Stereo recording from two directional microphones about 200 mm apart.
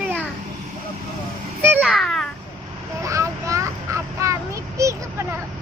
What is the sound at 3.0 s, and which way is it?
Child singing, 15° right (ahead or behind).